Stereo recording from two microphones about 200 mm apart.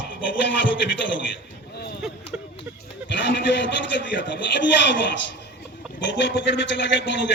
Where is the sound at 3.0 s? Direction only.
60° left (ahead or behind).